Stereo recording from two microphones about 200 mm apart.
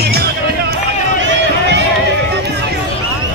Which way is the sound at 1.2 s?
65° right (ahead or behind).